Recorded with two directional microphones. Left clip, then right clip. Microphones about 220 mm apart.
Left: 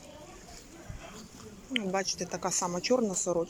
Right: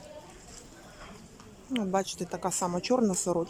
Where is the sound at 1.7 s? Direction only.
15° right (ahead or behind).